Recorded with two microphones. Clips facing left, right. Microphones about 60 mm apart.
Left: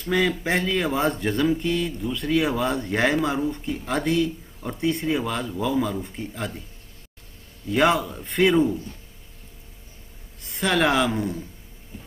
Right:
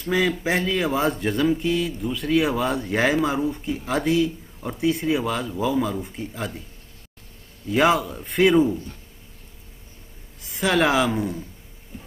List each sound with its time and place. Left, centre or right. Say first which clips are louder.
0.0 s speech: right 1 dB; centre
7.6 s speech: right 1 dB; centre
10.4 s speech: right 1 dB; centre